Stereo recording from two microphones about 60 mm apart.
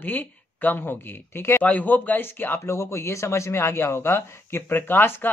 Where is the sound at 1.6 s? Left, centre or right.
Left.